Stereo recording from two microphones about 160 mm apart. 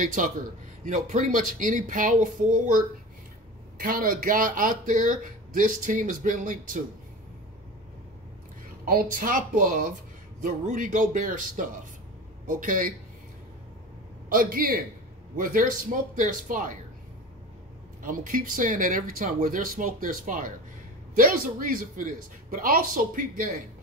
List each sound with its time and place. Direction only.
0.0 s speech: 55° right (ahead or behind)
8.8 s speech: 60° right (ahead or behind)
14.3 s speech: 60° right (ahead or behind)
18.0 s speech: 55° right (ahead or behind)